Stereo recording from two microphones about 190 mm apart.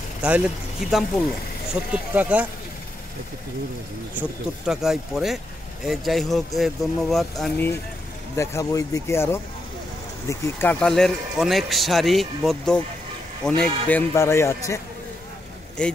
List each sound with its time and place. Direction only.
0.2 s speech: 5° right (ahead or behind)
4.1 s a man's voice: 5° right (ahead or behind); by 9.4 s 15° left (ahead or behind)
10.4 s a man's voice: 10° left (ahead or behind)
15.8 s speech: 5° left (ahead or behind)